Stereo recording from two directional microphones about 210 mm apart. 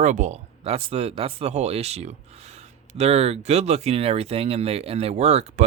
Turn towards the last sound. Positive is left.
turn(degrees=-30)  # may be behind; listen again after turning